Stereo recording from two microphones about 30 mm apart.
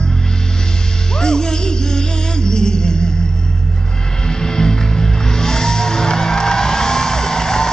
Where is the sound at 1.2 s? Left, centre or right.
Left.